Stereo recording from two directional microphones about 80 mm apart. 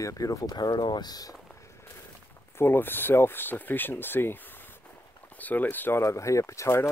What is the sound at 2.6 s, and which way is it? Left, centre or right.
Speech, left.